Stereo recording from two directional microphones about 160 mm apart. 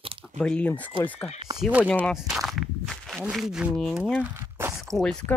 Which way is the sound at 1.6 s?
10° right (ahead or behind).